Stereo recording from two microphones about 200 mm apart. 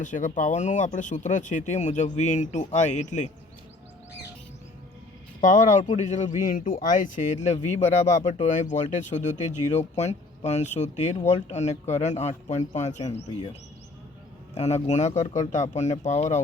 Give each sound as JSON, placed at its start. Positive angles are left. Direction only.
{"t": 0.0, "sound": "speech", "side_deg": 40}
{"t": 5.4, "sound": "speech", "side_deg": 40}
{"t": 14.5, "sound": "speech", "side_deg": 35}